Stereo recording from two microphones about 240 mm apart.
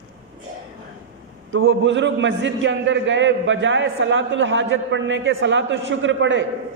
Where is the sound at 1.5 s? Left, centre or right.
Right.